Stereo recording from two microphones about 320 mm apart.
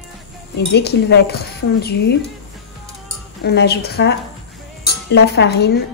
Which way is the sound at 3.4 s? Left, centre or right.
Left.